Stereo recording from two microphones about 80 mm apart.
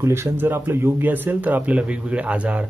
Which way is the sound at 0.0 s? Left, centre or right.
Right.